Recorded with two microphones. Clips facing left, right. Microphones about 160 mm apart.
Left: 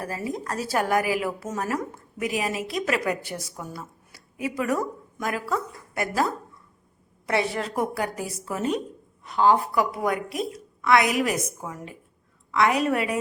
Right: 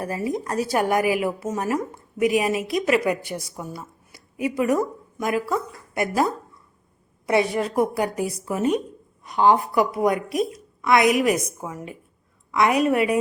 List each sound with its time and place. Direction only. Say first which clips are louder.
0.0 s a woman's voice: right 4 dB; 20° right (ahead or behind)